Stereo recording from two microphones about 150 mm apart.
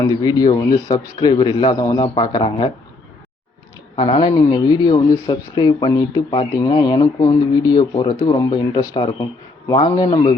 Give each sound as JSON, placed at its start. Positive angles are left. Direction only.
{"t": 0.1, "sound": "speech", "side_deg": 25}
{"t": 3.9, "sound": "speech", "side_deg": 30}